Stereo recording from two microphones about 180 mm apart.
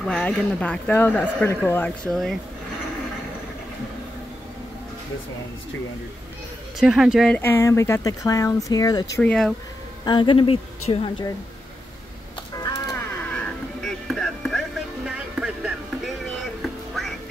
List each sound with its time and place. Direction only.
0.0 s speech: 5° left (ahead or behind)
6.8 s speech: 5° right (ahead or behind)
7.3 s speech: 15° left (ahead or behind)
9.2 s speech: 5° left (ahead or behind)
10.0 s a woman's voice: 25° left (ahead or behind)
12.5 s a sound: 20° left (ahead or behind)
13.3 s a sound: 5° left (ahead or behind)
16.6 s music: centre (ahead or behind)